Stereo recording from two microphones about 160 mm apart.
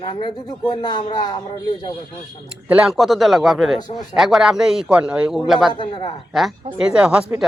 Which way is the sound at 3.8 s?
25° left (ahead or behind).